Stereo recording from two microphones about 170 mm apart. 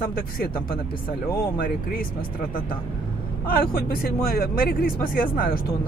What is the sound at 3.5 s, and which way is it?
Speech, 60° left (ahead or behind).